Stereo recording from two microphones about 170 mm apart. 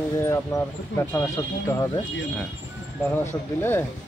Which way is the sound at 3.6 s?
15° left (ahead or behind).